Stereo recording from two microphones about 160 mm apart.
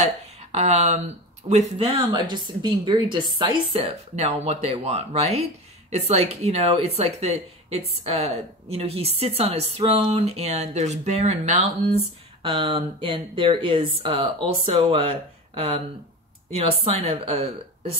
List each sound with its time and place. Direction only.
0.0 s speech: 45° right (ahead or behind)
12.4 s speech: 30° right (ahead or behind)